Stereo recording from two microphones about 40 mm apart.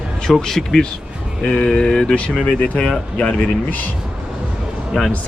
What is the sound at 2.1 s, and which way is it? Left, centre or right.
Speech, left.